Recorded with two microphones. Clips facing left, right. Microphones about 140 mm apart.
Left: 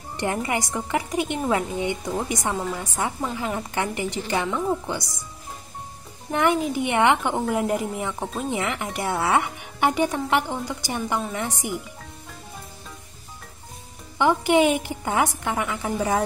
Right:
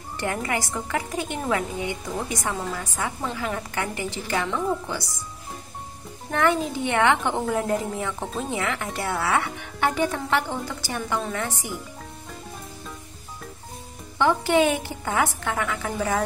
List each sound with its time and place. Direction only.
0.2 s a woman's voice: 20° left (ahead or behind)
6.3 s a woman's voice: 15° left (ahead or behind)
14.1 s a woman's voice: 15° left (ahead or behind)